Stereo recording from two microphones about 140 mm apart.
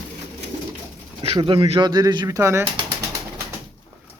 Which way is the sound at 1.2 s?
40° right (ahead or behind).